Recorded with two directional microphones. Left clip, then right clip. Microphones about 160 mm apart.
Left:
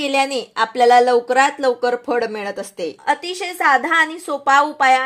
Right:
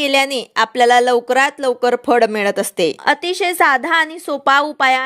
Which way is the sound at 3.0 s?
55° right (ahead or behind).